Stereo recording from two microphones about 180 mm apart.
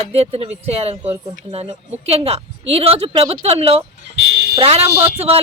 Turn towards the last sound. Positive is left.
turn(degrees=-35)  # may be behind; listen again after turning